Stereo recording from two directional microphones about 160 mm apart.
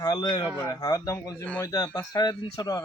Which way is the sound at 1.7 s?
20° left (ahead or behind).